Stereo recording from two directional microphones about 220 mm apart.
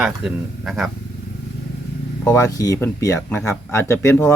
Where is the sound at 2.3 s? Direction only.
15° left (ahead or behind).